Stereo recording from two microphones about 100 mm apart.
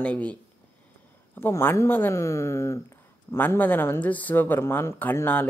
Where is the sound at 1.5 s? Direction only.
25° left (ahead or behind).